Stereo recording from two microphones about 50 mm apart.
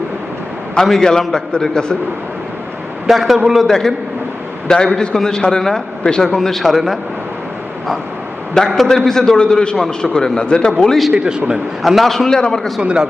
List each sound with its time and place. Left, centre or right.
0.9 s a man's voice: centre
3.1 s a man's voice: centre
4.7 s a man's voice: centre
8.5 s a man's voice: centre
10.8 s a man's voice: centre
11.3 s a man's voice: centre
11.8 s a man's voice: centre
12.8 s a man's voice: centre